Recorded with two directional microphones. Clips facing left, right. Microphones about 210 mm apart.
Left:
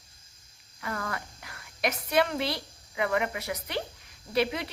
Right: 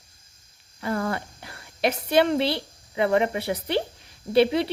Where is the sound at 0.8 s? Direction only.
30° right (ahead or behind).